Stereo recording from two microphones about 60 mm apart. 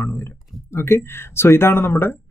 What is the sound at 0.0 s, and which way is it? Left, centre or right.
A man's voice, left.